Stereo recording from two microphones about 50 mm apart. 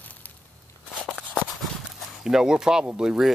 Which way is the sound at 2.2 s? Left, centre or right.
Centre.